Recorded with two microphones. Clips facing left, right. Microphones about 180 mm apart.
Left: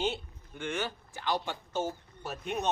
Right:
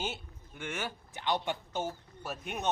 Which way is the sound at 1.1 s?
20° right (ahead or behind).